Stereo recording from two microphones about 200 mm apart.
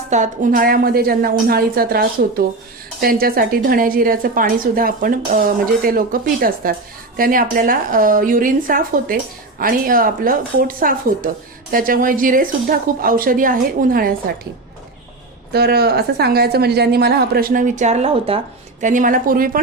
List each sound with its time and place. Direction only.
0.1 s a woman's voice: 40° right (ahead or behind)
15.5 s a woman's voice: 50° right (ahead or behind)